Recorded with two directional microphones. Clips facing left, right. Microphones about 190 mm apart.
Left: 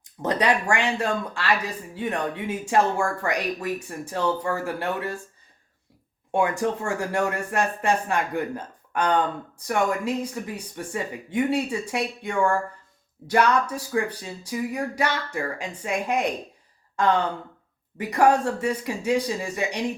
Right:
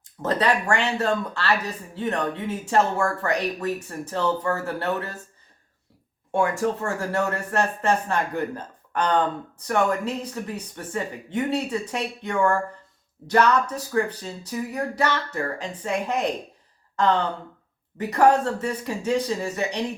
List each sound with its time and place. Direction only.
0.2 s speech: 15° left (ahead or behind)
6.3 s speech: 15° left (ahead or behind)
17.9 s speech: 10° left (ahead or behind)